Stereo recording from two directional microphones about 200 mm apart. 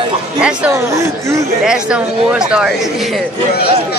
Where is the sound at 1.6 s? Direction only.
5° right (ahead or behind).